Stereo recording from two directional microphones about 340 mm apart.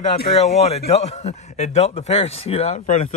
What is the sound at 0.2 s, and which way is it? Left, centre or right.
A man's voice, centre.